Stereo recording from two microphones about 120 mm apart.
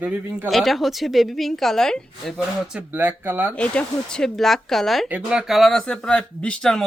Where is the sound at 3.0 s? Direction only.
15° right (ahead or behind).